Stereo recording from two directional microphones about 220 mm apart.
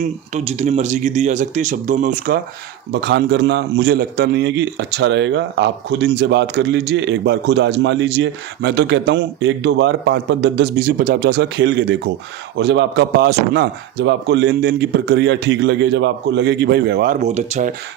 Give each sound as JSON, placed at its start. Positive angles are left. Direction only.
{"t": 0.0, "sound": "speech", "side_deg": -30}
{"t": 2.9, "sound": "a man's voice", "side_deg": -50}